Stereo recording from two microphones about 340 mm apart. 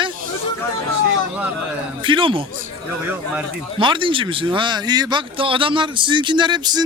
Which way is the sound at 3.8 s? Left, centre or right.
Centre.